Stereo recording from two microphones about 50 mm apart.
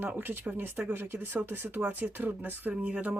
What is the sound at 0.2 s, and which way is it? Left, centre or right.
Speech, right.